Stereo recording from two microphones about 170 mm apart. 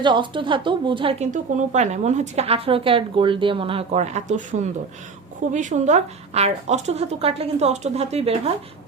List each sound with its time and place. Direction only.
0.0 s a woman's voice: 30° right (ahead or behind)
1.2 s a woman's voice: 45° right (ahead or behind)